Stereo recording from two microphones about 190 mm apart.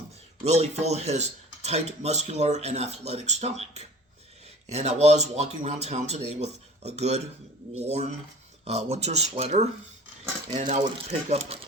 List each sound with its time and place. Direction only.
0.4 s speech: 35° right (ahead or behind)
10.9 s speech: 35° right (ahead or behind)